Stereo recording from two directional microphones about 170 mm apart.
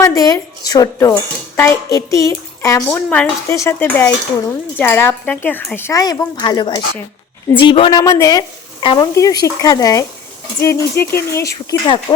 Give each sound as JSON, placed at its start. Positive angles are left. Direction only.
{"t": 0.0, "sound": "speech", "side_deg": 20}
{"t": 2.9, "sound": "a woman's voice", "side_deg": 5}